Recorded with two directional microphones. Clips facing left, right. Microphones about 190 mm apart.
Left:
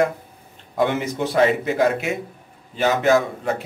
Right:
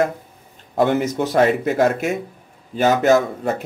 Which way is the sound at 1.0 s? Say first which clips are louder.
Right 2 dB; 45° right (ahead or behind).